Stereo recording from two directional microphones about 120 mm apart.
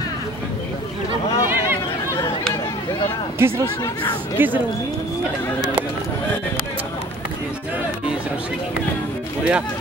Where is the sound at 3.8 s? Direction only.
35° left (ahead or behind).